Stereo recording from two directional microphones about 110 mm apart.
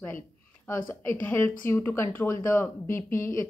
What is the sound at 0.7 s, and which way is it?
Speech, 20° left (ahead or behind).